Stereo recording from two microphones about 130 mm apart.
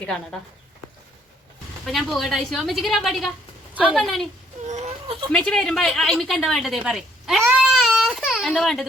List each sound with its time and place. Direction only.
0.0 s a woman's voice: 5° left (ahead or behind)
1.9 s a woman's voice: centre (ahead or behind)
4.6 s baby cry: 60° right (ahead or behind)
5.3 s a woman's voice: 5° left (ahead or behind)
6.8 s a sound: centre (ahead or behind)